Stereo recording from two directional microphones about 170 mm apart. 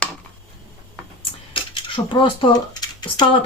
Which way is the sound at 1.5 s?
30° left (ahead or behind).